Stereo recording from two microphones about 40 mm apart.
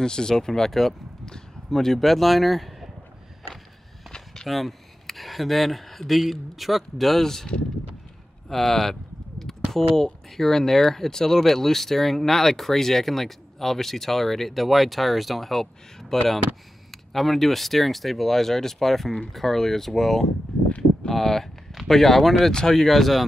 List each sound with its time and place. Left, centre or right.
0.0 s speech: centre
4.1 s a sound: centre
4.5 s speech: centre
8.5 s speech: centre
22.5 s speech: centre
22.8 s speech: centre